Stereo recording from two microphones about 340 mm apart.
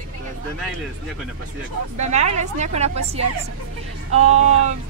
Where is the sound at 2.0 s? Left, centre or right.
Centre.